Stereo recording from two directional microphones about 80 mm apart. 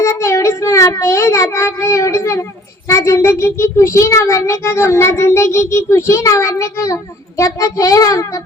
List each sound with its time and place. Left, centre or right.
0.0 s a child's voice: left